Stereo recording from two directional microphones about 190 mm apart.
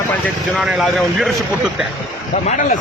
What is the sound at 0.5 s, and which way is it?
Speech, centre (ahead or behind).